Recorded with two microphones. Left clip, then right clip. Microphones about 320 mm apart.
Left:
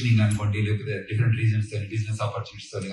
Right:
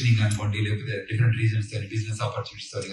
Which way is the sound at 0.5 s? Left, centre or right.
Centre.